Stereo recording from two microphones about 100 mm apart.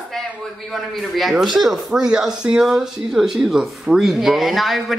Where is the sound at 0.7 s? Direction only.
Centre (ahead or behind).